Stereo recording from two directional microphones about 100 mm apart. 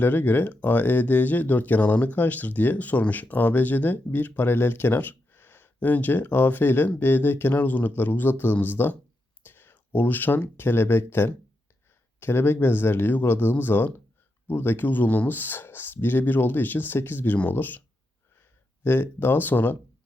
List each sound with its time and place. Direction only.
0.0 s speech: 20° left (ahead or behind)